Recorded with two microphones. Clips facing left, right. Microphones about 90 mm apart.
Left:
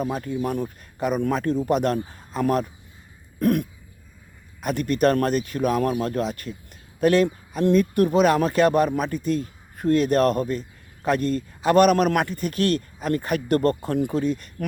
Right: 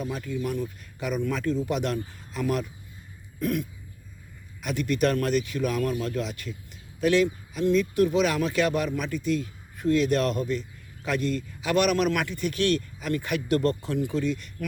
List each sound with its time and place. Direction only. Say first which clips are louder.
0.0 s speech: left 5 dB; 45° left (ahead or behind)
3.4 s throat clearing: left 6 dB; 55° left (ahead or behind)
4.6 s speech: left 4 dB; 45° left (ahead or behind)